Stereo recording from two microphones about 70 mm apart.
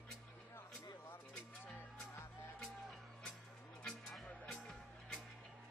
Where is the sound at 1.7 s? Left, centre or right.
Left.